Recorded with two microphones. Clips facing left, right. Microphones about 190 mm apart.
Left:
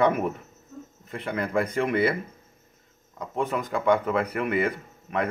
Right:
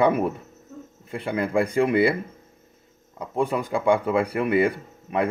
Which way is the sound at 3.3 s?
30° right (ahead or behind).